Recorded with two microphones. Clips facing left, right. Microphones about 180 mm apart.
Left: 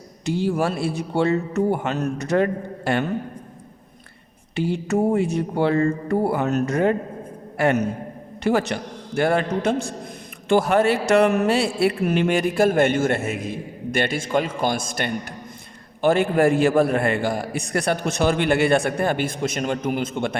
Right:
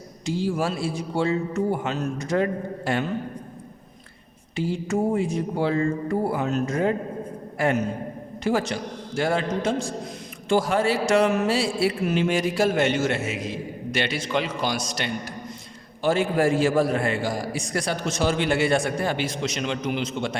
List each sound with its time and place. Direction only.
0.3 s a man's voice: 60° left (ahead or behind)
4.5 s a man's voice: 65° left (ahead or behind)